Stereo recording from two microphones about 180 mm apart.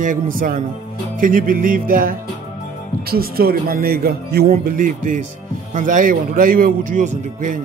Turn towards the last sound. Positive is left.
turn(degrees=-45)  # may be behind; listen again after turning